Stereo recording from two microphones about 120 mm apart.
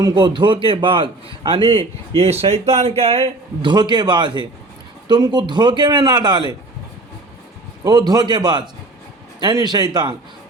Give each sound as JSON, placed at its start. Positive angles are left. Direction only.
{"t": 0.0, "sound": "a man's voice", "side_deg": -40}
{"t": 7.9, "sound": "a man's voice", "side_deg": -35}